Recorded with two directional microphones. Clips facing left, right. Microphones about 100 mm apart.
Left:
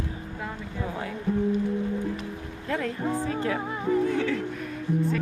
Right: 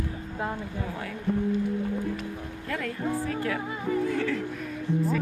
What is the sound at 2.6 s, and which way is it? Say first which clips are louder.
Speech: left 2 dB; 25° left (ahead or behind).